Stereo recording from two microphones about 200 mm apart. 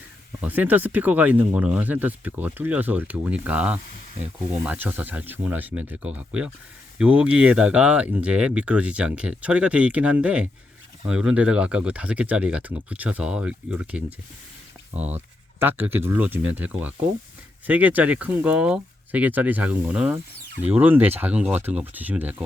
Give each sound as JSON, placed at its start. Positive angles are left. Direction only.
{"t": 0.4, "sound": "speech", "side_deg": -10}
{"t": 14.9, "sound": "speech", "side_deg": -35}
{"t": 15.5, "sound": "speech", "side_deg": -10}